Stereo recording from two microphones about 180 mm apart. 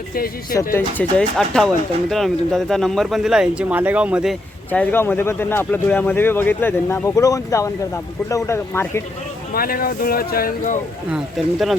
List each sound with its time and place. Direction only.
0.7 s speech: 10° left (ahead or behind)
4.7 s speech: 10° left (ahead or behind)
9.6 s speech: 55° left (ahead or behind)
11.4 s speech: centre (ahead or behind)